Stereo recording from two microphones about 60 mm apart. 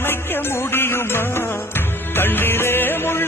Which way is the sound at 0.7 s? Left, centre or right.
Left.